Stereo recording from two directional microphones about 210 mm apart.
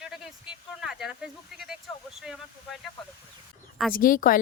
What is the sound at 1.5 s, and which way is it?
Speech, centre (ahead or behind).